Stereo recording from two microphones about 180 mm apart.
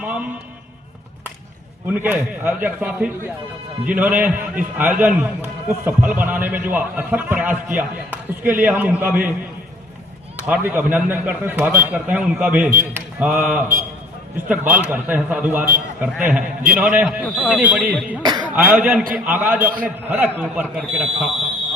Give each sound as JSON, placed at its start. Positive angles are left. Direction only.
{"t": 0.0, "sound": "a sound", "side_deg": -10}
{"t": 1.9, "sound": "speech", "side_deg": -10}
{"t": 10.3, "sound": "speech", "side_deg": -10}
{"t": 18.2, "sound": "speech", "side_deg": -25}
{"t": 18.5, "sound": "speech", "side_deg": -10}